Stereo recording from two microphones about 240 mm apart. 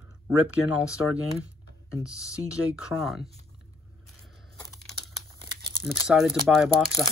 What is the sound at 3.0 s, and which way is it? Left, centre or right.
Speech, centre.